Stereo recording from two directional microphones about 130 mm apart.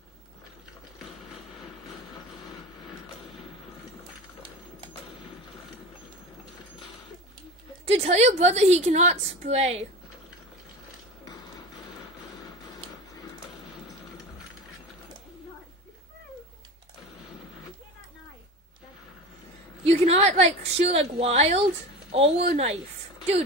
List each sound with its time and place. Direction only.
7.8 s a woman's voice: 55° right (ahead or behind)
19.8 s a sound: 50° right (ahead or behind)
22.1 s speech: 50° right (ahead or behind)